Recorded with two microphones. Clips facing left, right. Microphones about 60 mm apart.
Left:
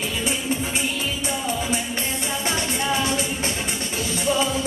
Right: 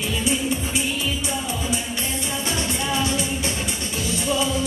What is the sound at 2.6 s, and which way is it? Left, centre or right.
Music, left.